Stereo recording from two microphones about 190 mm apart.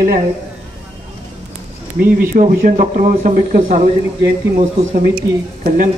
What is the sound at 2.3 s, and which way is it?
Speech, 45° right (ahead or behind).